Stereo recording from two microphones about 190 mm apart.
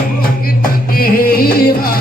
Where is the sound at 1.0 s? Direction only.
50° left (ahead or behind).